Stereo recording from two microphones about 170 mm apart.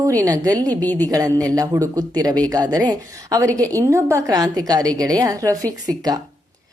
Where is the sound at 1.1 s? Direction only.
20° right (ahead or behind).